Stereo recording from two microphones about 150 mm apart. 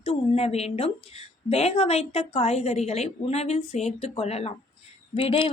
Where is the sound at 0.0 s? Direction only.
45° left (ahead or behind).